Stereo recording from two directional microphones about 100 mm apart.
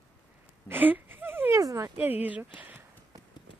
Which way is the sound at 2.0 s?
15° right (ahead or behind).